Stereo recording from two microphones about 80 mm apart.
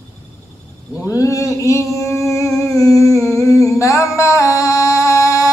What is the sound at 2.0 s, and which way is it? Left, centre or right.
Music, left.